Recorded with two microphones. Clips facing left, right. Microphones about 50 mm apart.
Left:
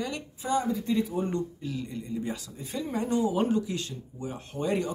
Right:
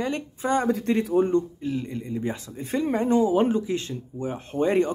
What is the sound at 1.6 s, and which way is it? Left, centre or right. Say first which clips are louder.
Speech: right 6 dB; right.